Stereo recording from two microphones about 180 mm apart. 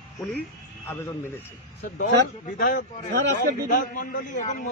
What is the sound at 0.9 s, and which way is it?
Speech, 15° left (ahead or behind).